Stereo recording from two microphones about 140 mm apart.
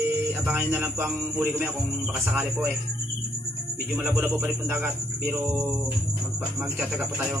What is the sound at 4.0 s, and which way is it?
Speech, 15° right (ahead or behind).